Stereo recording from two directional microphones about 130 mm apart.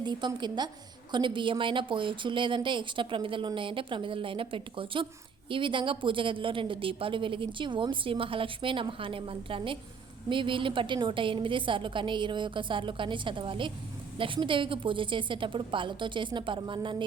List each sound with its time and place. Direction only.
0.0 s a woman's voice: 35° right (ahead or behind)